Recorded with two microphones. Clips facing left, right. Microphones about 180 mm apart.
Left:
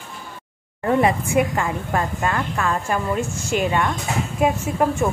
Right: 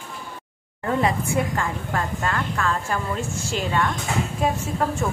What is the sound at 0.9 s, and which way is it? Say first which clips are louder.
Speech: left 4 dB; 20° left (ahead or behind).